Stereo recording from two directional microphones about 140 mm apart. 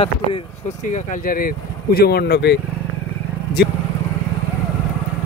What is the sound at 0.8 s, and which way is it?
Speech, 70° left (ahead or behind).